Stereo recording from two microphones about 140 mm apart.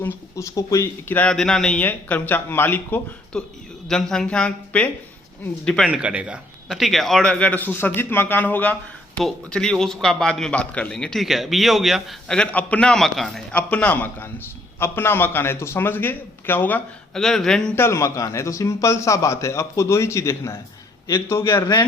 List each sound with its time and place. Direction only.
0.3 s a man's voice: 25° left (ahead or behind)
3.8 s a man's voice: 5° left (ahead or behind)
5.9 s a man's voice: 10° right (ahead or behind); by 16.8 s 15° left (ahead or behind)
17.2 s a man's voice: centre (ahead or behind)
17.7 s a man's voice: 20° left (ahead or behind)